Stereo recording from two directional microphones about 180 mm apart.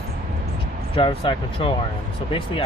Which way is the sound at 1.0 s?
30° left (ahead or behind).